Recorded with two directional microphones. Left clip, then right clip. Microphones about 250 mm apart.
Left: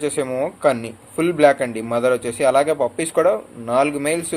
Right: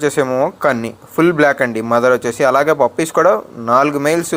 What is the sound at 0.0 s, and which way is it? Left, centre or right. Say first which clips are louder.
Speech: right 7 dB; centre.